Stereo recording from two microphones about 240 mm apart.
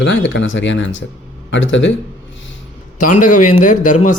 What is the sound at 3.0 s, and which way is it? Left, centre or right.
A man's voice, left.